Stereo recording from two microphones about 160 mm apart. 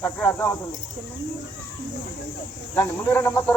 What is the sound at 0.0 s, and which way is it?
Speech, 10° left (ahead or behind).